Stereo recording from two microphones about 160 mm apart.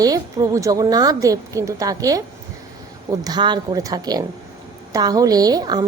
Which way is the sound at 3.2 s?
25° right (ahead or behind).